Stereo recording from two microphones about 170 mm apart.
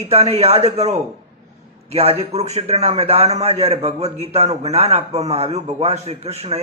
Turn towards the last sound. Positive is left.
turn(degrees=-40)  # may be behind; listen again after turning